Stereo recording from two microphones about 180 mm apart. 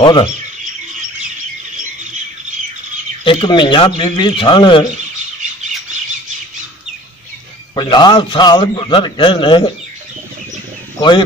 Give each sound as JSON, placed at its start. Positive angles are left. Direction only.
{"t": 0.0, "sound": "a man's voice", "side_deg": 25}
{"t": 3.3, "sound": "a man's voice", "side_deg": 25}
{"t": 7.7, "sound": "a man's voice", "side_deg": 25}
{"t": 11.0, "sound": "speech", "side_deg": 25}